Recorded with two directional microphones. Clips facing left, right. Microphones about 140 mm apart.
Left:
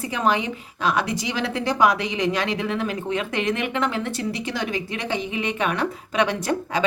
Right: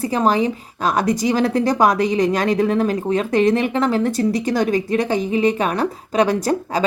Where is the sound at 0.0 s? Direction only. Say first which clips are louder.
Right 5 dB; 35° right (ahead or behind).